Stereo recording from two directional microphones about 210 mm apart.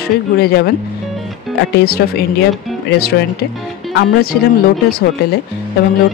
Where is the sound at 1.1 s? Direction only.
Centre (ahead or behind).